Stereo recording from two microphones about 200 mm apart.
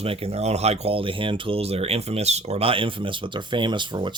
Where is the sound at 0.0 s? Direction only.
30° right (ahead or behind).